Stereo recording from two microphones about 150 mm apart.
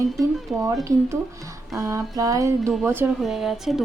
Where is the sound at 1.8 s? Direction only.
20° right (ahead or behind).